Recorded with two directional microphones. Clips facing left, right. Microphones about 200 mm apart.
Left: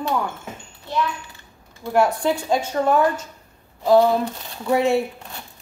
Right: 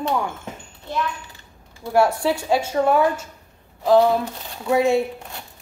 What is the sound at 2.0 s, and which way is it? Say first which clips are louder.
A woman's voice: right 1 dB; 10° right (ahead or behind).